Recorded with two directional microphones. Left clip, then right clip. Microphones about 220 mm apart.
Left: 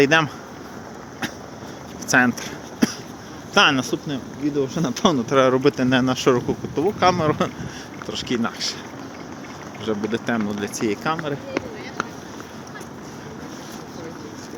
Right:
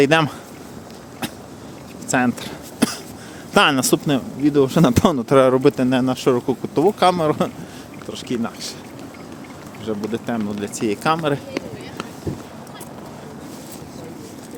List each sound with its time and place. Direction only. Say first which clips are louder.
0.0 s speech: right 1 dB; 20° right (ahead or behind)
2.0 s speech: left 2 dB; 10° right (ahead or behind)
3.5 s speech: right 2 dB; 30° right (ahead or behind)
5.3 s speech: right 4 dB; 25° right (ahead or behind)
6.5 s speech: right 5 dB; 25° right (ahead or behind); by 8.7 s 5° right (ahead or behind)
9.8 s speech: left 1 dB; 5° right (ahead or behind)